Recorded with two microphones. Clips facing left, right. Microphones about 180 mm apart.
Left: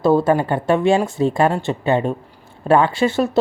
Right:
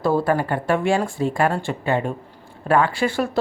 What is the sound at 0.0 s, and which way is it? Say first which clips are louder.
Speech: left 4 dB; 25° left (ahead or behind).